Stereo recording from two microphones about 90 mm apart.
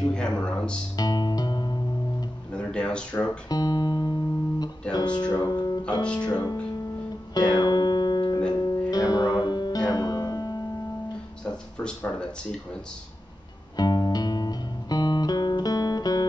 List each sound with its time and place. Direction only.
0.1 s music: 10° left (ahead or behind)
0.9 s music: 50° left (ahead or behind)
2.5 s a sound: 10° left (ahead or behind)
3.4 s music: 45° left (ahead or behind)
4.9 s speech: 55° left (ahead or behind)
6.0 s speech: 15° left (ahead or behind)
7.3 s music: 45° left (ahead or behind)
11.4 s speech: 10° left (ahead or behind)
13.7 s music: 50° left (ahead or behind)